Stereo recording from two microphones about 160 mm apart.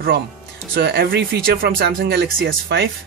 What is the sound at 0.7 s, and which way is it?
Speech, 75° right (ahead or behind).